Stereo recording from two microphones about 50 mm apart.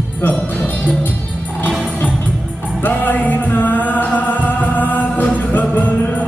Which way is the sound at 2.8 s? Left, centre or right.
Left.